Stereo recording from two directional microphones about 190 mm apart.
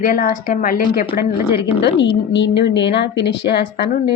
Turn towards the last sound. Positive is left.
turn(degrees=60)  # may be behind; listen again after turning